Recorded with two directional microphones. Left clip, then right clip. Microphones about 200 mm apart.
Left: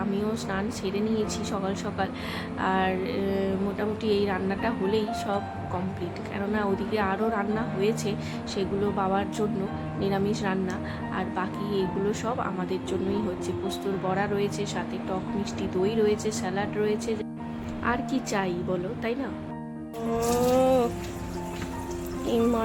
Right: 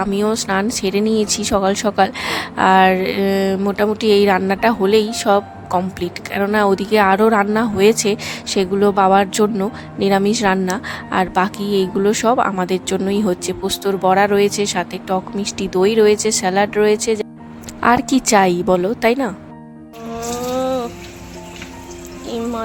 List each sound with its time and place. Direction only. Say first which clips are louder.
0.0 s speech: right 11 dB; 55° right (ahead or behind)
20.3 s a sound: right 2 dB; centre (ahead or behind)
22.3 s music: right 1 dB; centre (ahead or behind)